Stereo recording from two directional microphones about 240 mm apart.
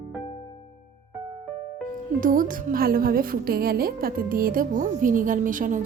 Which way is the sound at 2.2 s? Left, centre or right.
Right.